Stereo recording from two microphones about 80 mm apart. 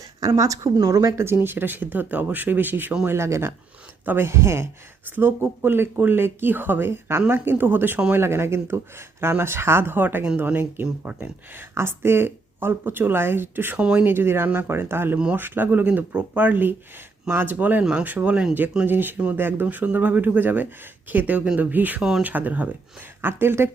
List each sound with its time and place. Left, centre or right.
0.2 s speech: right
3.1 s speech: right